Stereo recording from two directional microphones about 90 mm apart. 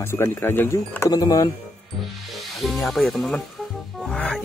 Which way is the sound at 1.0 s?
40° left (ahead or behind).